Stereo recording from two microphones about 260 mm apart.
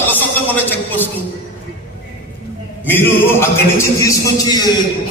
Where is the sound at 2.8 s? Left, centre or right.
Centre.